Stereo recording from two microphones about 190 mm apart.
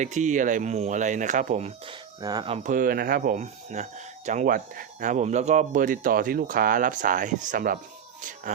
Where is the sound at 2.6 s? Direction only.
45° right (ahead or behind).